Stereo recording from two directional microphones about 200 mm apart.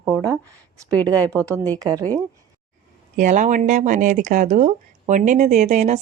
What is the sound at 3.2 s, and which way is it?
Speech, 40° right (ahead or behind).